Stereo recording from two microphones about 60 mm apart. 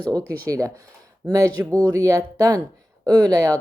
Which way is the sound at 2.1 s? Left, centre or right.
Right.